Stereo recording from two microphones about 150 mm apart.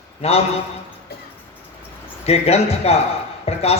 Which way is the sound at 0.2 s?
45° left (ahead or behind).